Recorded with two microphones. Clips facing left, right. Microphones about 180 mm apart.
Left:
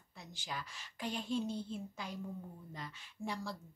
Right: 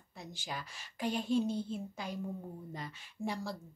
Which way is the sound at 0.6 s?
10° right (ahead or behind).